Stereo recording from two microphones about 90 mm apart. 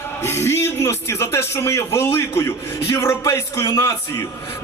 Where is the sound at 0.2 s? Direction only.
30° left (ahead or behind).